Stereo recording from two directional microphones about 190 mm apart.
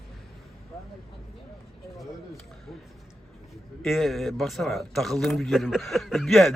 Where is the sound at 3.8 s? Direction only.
Centre (ahead or behind).